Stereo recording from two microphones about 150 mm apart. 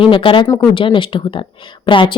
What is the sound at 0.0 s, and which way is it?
A woman's voice, 35° left (ahead or behind).